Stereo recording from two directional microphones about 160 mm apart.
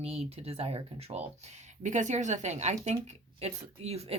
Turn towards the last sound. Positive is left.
turn(degrees=-40)  # may be behind; listen again after turning